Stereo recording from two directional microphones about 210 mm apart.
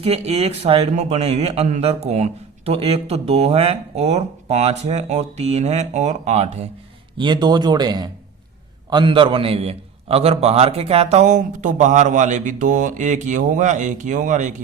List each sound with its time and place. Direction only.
0.0 s a man's voice: 30° right (ahead or behind)
7.2 s a man's voice: 20° right (ahead or behind); by 14.5 s 35° right (ahead or behind)